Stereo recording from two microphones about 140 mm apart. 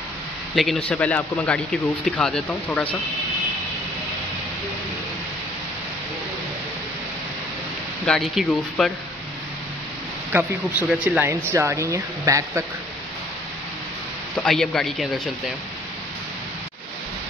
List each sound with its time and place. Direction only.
0.6 s speech: 5° left (ahead or behind)
8.0 s speech: 5° left (ahead or behind)
10.3 s speech: 10° right (ahead or behind)
14.4 s speech: 5° left (ahead or behind)